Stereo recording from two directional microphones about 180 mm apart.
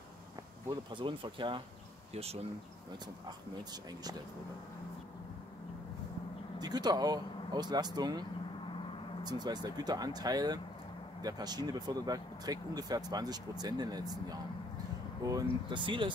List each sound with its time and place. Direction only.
0.7 s speech: 25° right (ahead or behind)
3.3 s speech: 20° right (ahead or behind)
6.6 s speech: 20° right (ahead or behind)